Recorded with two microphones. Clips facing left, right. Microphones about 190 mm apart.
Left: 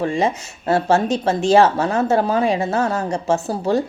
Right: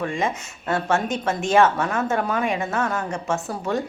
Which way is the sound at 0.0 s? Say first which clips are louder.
Left 5 dB; 35° left (ahead or behind).